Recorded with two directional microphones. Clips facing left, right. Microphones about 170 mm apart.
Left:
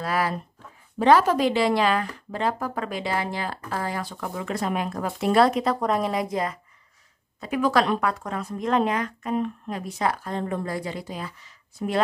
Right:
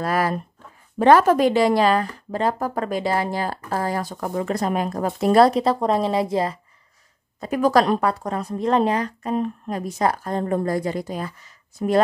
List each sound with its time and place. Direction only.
0.0 s speech: 45° right (ahead or behind); by 6.6 s 30° right (ahead or behind)
7.3 s speech: 40° right (ahead or behind)